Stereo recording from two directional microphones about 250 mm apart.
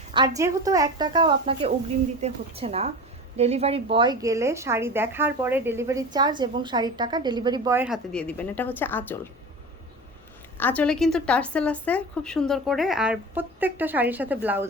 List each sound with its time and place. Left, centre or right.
0.1 s a woman's voice: centre
10.6 s speech: centre